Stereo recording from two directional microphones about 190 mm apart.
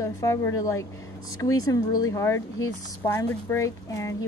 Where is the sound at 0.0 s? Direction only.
15° left (ahead or behind).